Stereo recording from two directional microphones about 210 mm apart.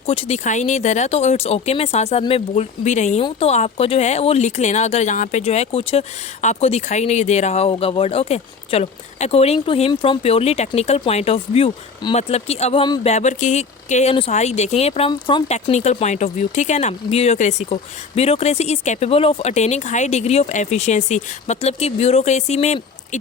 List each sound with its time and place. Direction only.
0.0 s speech: 25° left (ahead or behind)